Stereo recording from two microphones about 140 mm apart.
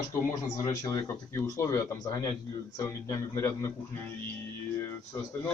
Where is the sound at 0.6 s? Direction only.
20° left (ahead or behind).